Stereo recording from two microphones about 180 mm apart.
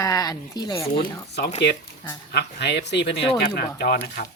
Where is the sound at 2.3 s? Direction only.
70° left (ahead or behind).